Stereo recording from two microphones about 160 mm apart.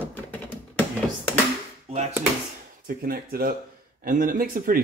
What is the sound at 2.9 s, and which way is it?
Speech, 65° right (ahead or behind).